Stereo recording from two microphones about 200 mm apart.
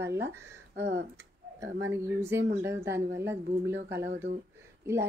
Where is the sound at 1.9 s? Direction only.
15° right (ahead or behind).